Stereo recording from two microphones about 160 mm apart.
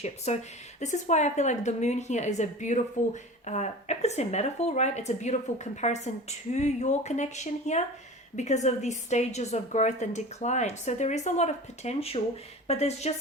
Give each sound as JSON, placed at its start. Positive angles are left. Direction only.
{"t": 0.3, "sound": "a woman's voice", "side_deg": 45}